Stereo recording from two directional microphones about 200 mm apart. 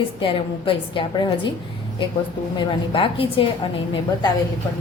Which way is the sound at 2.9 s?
25° left (ahead or behind).